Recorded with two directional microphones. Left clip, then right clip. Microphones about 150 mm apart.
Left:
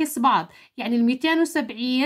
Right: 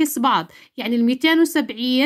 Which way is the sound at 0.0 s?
30° right (ahead or behind).